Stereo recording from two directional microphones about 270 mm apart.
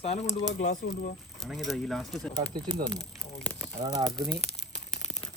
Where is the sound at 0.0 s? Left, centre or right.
Left.